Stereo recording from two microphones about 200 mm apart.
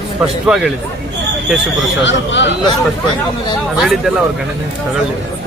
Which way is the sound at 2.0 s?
65° left (ahead or behind).